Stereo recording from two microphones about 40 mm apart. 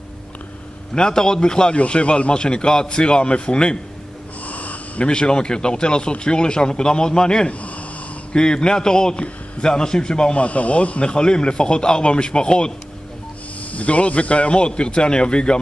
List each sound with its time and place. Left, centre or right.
0.9 s speech: centre
4.5 s snort: left
5.0 s speech: left
10.4 s speech: left
11.1 s speech: left
13.7 s speech: left